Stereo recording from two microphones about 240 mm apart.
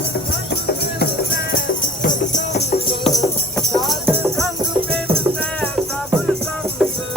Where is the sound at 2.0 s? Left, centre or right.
Left.